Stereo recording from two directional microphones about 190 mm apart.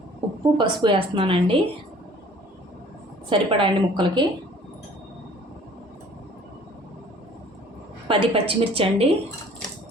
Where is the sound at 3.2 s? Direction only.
25° right (ahead or behind).